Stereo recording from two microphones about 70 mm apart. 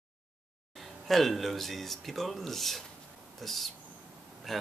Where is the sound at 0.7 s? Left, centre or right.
Centre.